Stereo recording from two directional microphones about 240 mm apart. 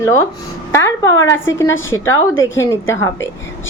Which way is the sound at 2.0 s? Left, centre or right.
Centre.